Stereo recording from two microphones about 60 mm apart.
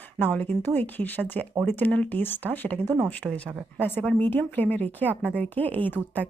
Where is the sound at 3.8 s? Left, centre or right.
Left.